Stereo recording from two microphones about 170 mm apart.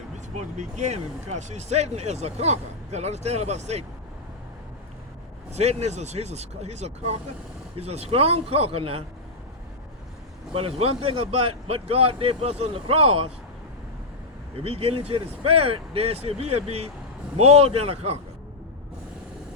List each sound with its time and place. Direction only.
0.3 s speech: 45° right (ahead or behind)
5.5 s speech: 40° right (ahead or behind)
10.5 s speech: 35° right (ahead or behind)
14.6 s speech: 35° right (ahead or behind)